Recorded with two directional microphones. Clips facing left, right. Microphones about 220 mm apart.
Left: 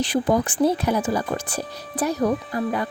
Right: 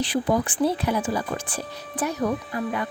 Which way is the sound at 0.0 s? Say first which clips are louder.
Left 2 dB; 45° left (ahead or behind).